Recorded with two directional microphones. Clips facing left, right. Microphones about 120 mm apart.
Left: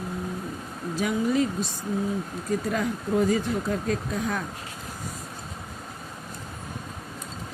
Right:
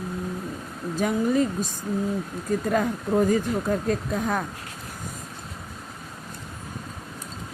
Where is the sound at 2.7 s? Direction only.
45° right (ahead or behind).